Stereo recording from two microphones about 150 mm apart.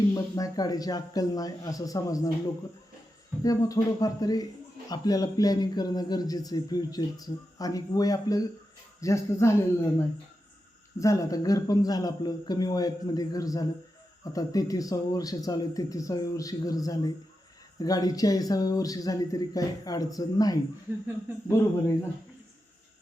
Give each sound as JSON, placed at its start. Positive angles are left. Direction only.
{"t": 0.1, "sound": "a man's voice", "side_deg": 25}
{"t": 3.4, "sound": "a man's voice", "side_deg": 20}
{"t": 11.0, "sound": "a man's voice", "side_deg": 20}